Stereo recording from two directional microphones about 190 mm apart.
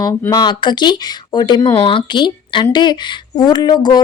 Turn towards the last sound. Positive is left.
turn(degrees=20)  # may be behind; listen again after turning